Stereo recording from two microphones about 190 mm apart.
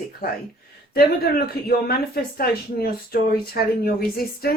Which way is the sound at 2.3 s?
55° left (ahead or behind).